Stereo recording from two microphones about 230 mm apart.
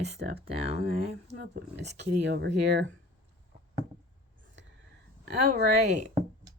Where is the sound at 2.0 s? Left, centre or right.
Right.